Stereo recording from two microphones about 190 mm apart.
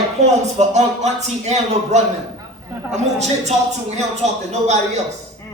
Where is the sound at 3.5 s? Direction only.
35° right (ahead or behind).